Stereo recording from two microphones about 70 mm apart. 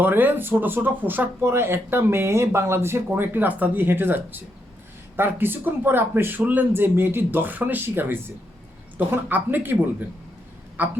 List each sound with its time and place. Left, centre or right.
0.0 s speech: right
10.8 s speech: right